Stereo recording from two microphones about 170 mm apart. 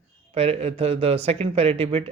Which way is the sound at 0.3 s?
35° right (ahead or behind).